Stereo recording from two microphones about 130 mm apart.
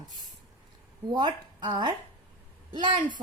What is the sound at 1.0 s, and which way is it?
A woman's voice, 35° right (ahead or behind).